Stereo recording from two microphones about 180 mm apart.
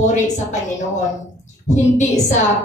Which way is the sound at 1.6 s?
40° left (ahead or behind).